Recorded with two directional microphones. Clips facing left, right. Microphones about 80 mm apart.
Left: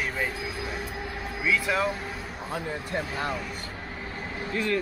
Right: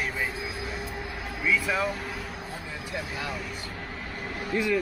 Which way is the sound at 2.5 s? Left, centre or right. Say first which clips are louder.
Left 7 dB; left.